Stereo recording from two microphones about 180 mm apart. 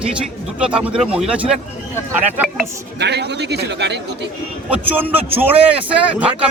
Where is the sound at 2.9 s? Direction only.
70° right (ahead or behind).